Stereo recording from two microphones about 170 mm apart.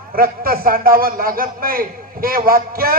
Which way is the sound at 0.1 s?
60° right (ahead or behind).